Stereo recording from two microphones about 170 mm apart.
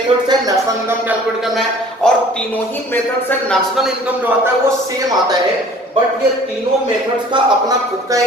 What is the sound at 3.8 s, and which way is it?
Speech, 10° right (ahead or behind).